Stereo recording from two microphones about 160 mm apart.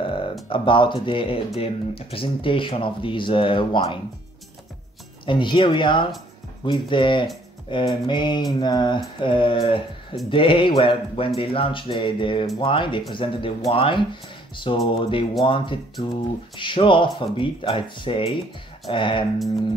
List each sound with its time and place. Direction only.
0.0 s music: 35° left (ahead or behind)
1.0 s speech: 35° left (ahead or behind)
5.2 s speech: 30° left (ahead or behind)